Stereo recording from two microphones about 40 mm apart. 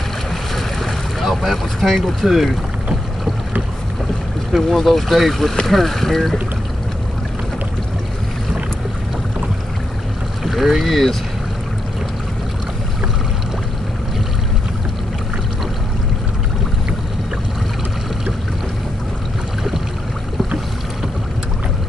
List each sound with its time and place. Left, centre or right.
0.6 s boat: centre
4.5 s speech: centre
10.4 s speech: centre